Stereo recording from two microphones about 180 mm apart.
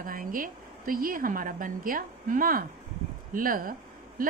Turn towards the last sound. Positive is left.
turn(degrees=-50)  # may be behind; listen again after turning